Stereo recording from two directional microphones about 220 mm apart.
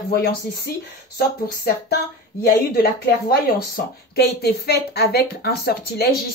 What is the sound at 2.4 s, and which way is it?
Speech, 45° left (ahead or behind).